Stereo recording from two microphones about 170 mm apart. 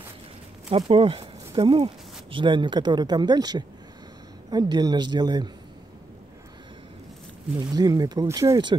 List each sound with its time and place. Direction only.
0.7 s speech: 35° right (ahead or behind)
7.5 s speech: 20° right (ahead or behind)